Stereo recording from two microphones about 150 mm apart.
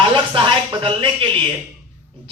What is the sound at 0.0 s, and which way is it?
Speech, 35° right (ahead or behind).